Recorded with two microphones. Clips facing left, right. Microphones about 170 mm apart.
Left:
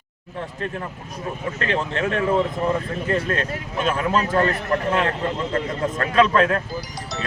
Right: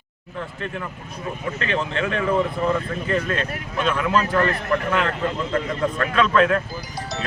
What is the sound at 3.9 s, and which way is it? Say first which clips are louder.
Speech: even; 35° left (ahead or behind).